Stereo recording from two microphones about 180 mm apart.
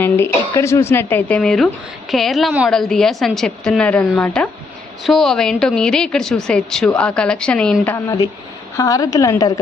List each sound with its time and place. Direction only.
0.0 s a woman's voice: 15° left (ahead or behind)